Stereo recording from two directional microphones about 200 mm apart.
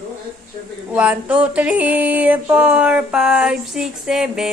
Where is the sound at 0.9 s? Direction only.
5° right (ahead or behind).